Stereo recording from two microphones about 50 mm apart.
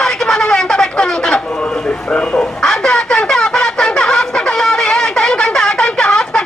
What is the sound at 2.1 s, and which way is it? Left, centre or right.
Bow-wow, left.